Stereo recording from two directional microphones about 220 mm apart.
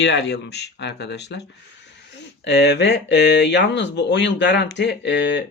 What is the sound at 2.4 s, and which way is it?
Speech, 50° left (ahead or behind).